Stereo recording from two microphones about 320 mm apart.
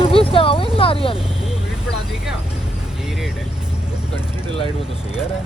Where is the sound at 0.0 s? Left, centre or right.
Centre.